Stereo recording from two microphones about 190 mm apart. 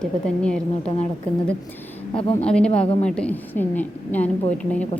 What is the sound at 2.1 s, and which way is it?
Speech, 30° left (ahead or behind).